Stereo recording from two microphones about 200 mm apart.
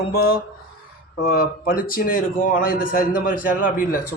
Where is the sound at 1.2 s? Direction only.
45° left (ahead or behind).